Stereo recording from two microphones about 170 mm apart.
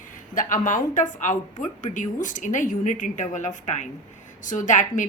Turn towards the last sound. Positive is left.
turn(degrees=50)  # may be behind; listen again after turning